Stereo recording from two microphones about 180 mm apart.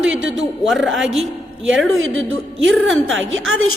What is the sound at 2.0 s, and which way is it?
Speech, 90° right.